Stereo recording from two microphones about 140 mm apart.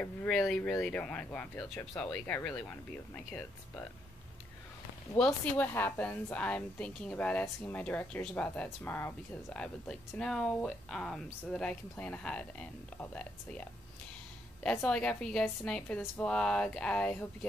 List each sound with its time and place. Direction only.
0.0 s a woman's voice: 10° left (ahead or behind)
2.5 s speech: 20° left (ahead or behind)
5.1 s a woman's voice: 10° left (ahead or behind)